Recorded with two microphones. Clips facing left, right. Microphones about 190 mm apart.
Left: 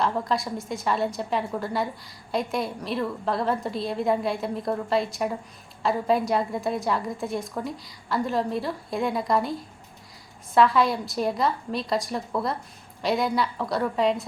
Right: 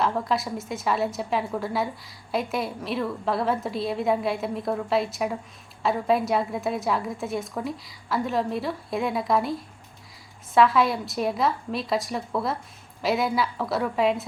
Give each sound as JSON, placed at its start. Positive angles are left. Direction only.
{"t": 0.0, "sound": "a woman's voice", "side_deg": 0}